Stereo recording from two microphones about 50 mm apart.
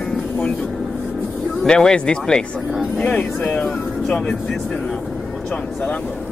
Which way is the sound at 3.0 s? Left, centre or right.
Left.